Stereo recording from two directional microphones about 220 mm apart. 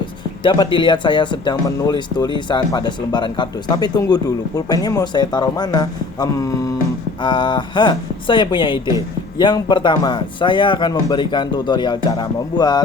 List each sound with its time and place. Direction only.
0.0 s speech: 20° left (ahead or behind)